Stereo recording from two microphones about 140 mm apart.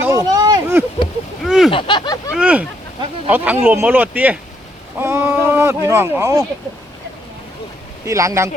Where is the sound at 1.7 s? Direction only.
35° left (ahead or behind).